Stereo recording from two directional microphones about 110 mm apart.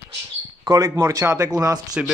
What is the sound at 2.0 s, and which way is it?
Speech, 10° right (ahead or behind).